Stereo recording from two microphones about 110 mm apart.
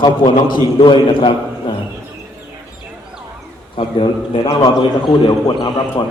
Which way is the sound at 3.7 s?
55° left (ahead or behind).